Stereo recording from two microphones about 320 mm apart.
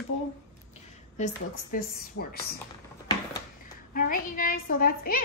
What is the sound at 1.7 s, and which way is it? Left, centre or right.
Speech, left.